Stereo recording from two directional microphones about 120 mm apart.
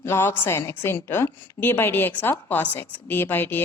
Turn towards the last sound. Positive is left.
turn(degrees=15)  # may be behind; listen again after turning